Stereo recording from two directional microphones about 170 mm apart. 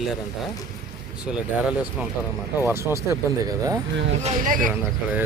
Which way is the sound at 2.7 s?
15° right (ahead or behind).